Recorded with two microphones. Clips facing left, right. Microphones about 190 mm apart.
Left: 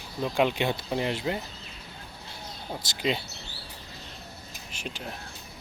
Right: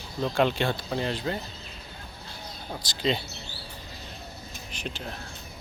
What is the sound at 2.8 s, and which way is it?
Speech, 25° left (ahead or behind).